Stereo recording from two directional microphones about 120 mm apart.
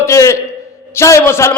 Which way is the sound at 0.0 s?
25° left (ahead or behind).